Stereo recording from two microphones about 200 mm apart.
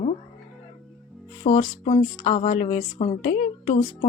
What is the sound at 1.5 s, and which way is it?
Speech, 35° left (ahead or behind).